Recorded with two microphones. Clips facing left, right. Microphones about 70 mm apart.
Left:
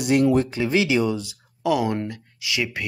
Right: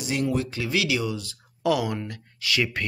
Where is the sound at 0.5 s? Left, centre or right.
Left.